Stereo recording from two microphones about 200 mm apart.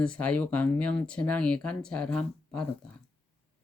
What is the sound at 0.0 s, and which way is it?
Speech, 5° left (ahead or behind).